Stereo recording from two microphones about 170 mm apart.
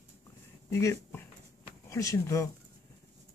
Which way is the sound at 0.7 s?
15° left (ahead or behind).